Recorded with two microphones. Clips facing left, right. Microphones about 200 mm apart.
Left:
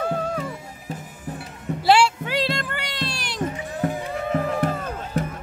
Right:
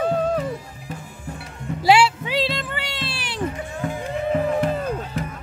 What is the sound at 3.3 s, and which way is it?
Music, 35° left (ahead or behind).